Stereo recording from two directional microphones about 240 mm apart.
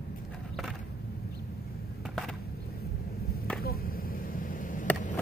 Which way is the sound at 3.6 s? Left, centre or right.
Left.